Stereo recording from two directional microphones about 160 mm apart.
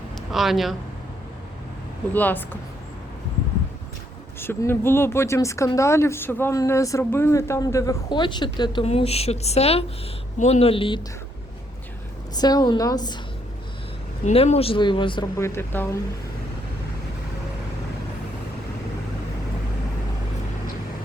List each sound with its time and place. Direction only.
0.3 s speech: centre (ahead or behind)
2.1 s speech: 10° left (ahead or behind)
4.4 s a woman's voice: 15° left (ahead or behind)
8.8 s speech: 40° left (ahead or behind)
12.4 s a woman's voice: 25° left (ahead or behind)
14.3 s speech: 40° left (ahead or behind)
15.4 s speech: 15° left (ahead or behind)